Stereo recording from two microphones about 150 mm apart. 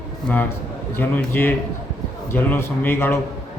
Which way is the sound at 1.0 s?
15° left (ahead or behind).